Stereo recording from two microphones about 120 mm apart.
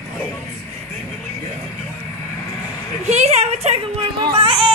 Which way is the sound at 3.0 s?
65° right (ahead or behind).